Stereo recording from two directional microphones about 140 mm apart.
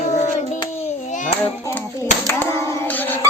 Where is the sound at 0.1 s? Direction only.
60° left (ahead or behind).